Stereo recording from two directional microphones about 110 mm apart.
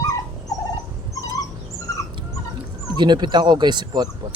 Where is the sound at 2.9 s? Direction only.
40° right (ahead or behind).